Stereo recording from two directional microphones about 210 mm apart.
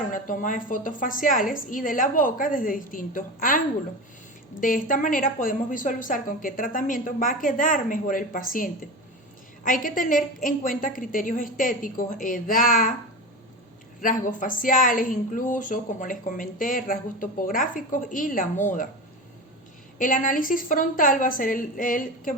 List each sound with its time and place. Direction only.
0.1 s speech: 40° left (ahead or behind)
4.6 s speech: 40° left (ahead or behind)
14.0 s speech: 40° left (ahead or behind)
20.0 s speech: 40° left (ahead or behind)